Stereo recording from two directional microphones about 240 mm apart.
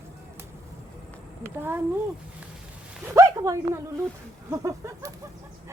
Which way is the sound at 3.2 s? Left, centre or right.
Centre.